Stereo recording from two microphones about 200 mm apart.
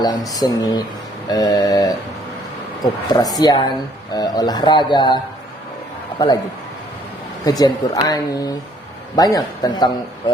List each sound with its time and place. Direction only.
0.0 s a man's voice: 20° left (ahead or behind)
7.4 s a man's voice: 20° left (ahead or behind)